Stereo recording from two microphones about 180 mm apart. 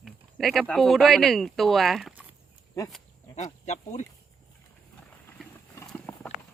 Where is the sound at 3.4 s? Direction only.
40° left (ahead or behind).